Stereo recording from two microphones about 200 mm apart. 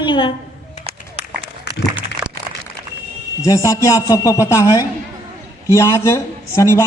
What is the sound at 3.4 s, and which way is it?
A man's voice, 15° left (ahead or behind).